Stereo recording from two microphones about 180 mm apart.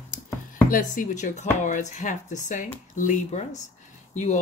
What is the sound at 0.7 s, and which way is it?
Speech, 45° left (ahead or behind).